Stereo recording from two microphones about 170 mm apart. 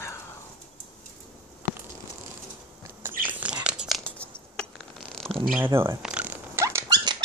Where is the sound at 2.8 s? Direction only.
10° right (ahead or behind); by 4.3 s 5° left (ahead or behind).